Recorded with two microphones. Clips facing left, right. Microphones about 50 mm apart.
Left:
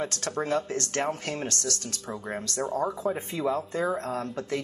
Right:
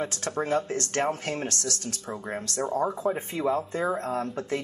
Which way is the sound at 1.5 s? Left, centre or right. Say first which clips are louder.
Even; left.